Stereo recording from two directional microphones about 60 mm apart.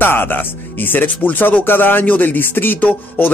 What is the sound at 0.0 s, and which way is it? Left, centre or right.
A man's voice, left.